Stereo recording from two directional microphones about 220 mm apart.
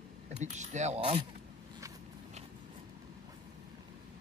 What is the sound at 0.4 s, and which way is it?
Speech, 35° right (ahead or behind).